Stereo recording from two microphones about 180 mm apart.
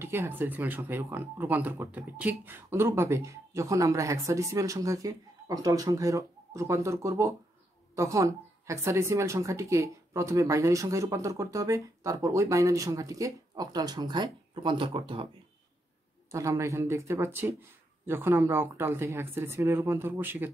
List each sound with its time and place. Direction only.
0.0 s speech: 10° right (ahead or behind); by 15.2 s 30° right (ahead or behind)
16.3 s speech: 15° right (ahead or behind)